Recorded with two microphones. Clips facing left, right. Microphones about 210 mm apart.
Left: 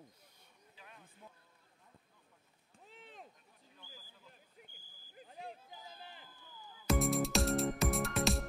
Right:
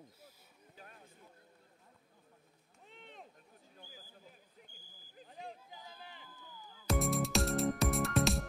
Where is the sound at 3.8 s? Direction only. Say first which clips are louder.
Right 3 dB; 50° right (ahead or behind).